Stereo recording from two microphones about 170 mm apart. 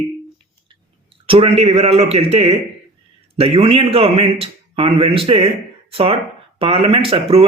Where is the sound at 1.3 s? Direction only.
35° right (ahead or behind).